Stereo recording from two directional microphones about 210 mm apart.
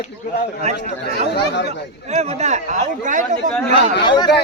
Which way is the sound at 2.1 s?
35° right (ahead or behind).